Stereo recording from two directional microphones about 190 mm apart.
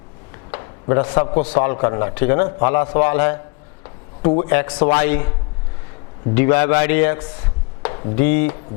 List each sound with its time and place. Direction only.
0.5 s a sound: 15° left (ahead or behind)
1.4 s a man's voice: 15° left (ahead or behind)
6.3 s a man's voice: 15° left (ahead or behind)